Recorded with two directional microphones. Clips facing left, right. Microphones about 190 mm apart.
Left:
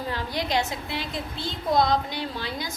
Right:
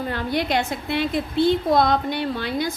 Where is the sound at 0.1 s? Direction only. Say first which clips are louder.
Right 4 dB; 60° right (ahead or behind).